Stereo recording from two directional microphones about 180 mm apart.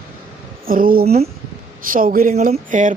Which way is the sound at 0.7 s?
50° right (ahead or behind).